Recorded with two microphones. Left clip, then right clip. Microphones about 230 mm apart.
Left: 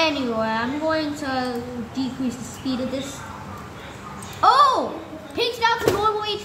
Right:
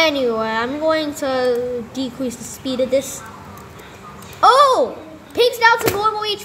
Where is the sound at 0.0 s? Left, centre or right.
Right.